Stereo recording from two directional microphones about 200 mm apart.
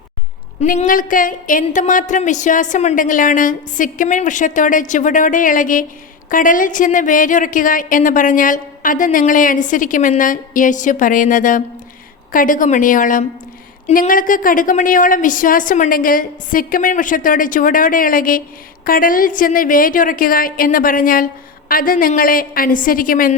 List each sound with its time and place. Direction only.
0.6 s a woman's voice: 40° left (ahead or behind)